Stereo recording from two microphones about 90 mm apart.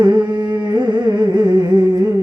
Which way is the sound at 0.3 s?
55° right (ahead or behind).